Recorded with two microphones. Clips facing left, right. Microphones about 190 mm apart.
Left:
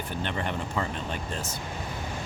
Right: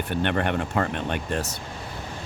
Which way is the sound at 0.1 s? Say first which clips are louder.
Right 8 dB; 65° right (ahead or behind).